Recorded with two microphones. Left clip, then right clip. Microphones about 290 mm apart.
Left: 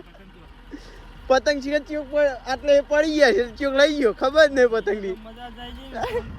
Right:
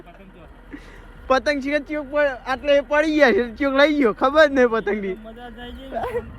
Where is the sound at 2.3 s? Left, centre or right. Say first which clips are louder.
Even; right.